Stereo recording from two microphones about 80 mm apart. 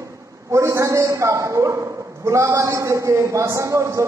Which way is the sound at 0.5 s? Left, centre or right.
Right.